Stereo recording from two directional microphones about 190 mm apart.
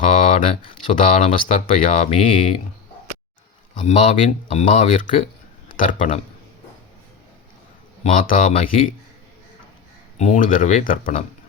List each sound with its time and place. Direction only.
0.1 s a sound: 40° left (ahead or behind)
0.9 s speech: 35° left (ahead or behind)
3.8 s a man's voice: 40° left (ahead or behind)
8.0 s speech: 45° left (ahead or behind)
10.2 s speech: 40° left (ahead or behind)